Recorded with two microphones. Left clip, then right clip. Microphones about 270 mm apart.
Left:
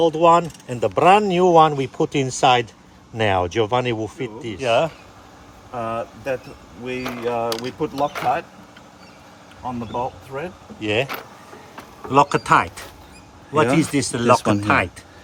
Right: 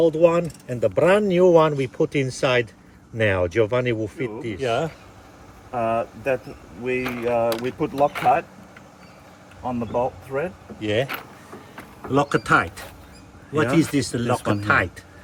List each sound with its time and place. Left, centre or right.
0.0 s speech: centre
7.5 s speech: centre
7.8 s speech: centre
9.6 s speech: centre
11.0 s speech: centre
11.8 s speech: centre
13.9 s speech: centre
14.3 s speech: left
14.6 s speech: centre